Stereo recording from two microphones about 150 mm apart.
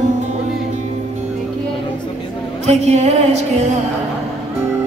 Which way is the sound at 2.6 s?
50° right (ahead or behind).